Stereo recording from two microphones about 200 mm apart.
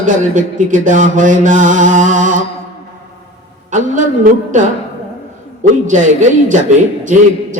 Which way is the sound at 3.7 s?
40° right (ahead or behind).